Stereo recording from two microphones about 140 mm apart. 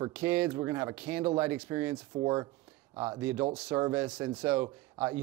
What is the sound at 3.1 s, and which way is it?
Speech, 15° right (ahead or behind).